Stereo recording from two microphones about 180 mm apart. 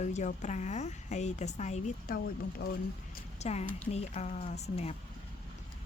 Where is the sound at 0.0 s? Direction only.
40° left (ahead or behind).